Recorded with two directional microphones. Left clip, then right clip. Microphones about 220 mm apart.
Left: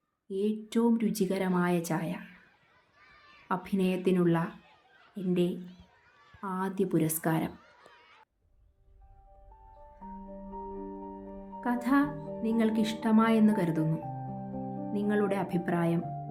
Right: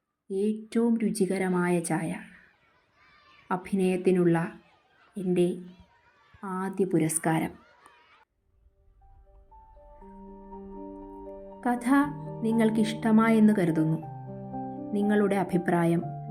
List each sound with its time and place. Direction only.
0.3 s speech: 10° right (ahead or behind)
3.5 s a woman's voice: 10° right (ahead or behind)
11.6 s speech: 20° right (ahead or behind)
14.9 s speech: 20° right (ahead or behind)